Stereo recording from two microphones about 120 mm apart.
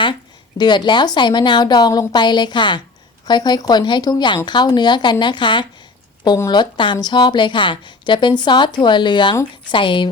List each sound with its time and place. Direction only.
0.6 s a woman's voice: 40° left (ahead or behind)